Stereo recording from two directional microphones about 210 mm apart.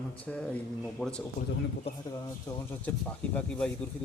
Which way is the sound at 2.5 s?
15° left (ahead or behind).